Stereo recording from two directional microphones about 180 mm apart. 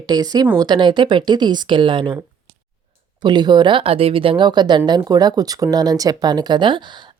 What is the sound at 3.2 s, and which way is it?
Speech, 25° right (ahead or behind).